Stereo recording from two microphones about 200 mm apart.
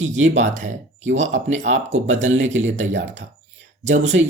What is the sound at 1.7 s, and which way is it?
Speech, 70° right (ahead or behind).